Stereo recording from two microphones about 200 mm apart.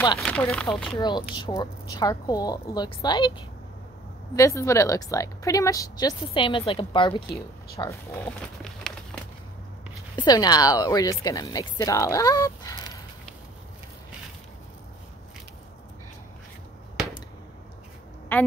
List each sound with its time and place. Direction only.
0.2 s speech: 5° left (ahead or behind)
0.9 s a woman's voice: 20° left (ahead or behind)
7.2 s a woman's voice: 15° left (ahead or behind)
8.6 s crumpling: 5° left (ahead or behind)
10.1 s a woman's voice: 20° left (ahead or behind)
18.3 s a woman's voice: 10° left (ahead or behind)